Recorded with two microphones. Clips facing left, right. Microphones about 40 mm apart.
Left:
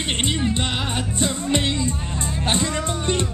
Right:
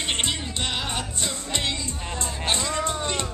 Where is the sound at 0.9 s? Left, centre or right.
Left.